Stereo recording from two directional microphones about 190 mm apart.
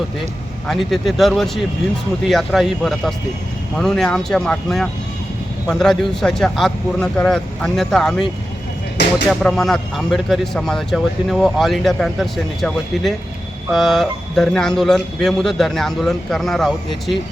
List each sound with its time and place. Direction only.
0.7 s speech: centre (ahead or behind)
9.0 s speech: 65° left (ahead or behind)
9.3 s speech: centre (ahead or behind)